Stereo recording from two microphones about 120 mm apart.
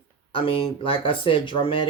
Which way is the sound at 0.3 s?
45° left (ahead or behind).